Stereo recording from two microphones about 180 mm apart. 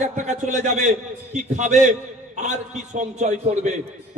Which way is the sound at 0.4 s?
45° right (ahead or behind).